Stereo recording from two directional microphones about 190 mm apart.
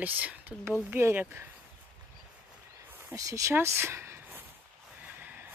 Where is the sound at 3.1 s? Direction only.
15° right (ahead or behind).